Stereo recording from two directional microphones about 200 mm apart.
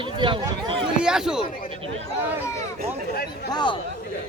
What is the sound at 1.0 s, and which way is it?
Speech, 5° right (ahead or behind).